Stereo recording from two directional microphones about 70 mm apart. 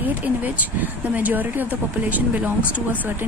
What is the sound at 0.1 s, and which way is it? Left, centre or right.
Speech, right.